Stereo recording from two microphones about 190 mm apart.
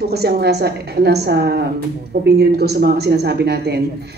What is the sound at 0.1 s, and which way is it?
A man's voice, 60° right (ahead or behind).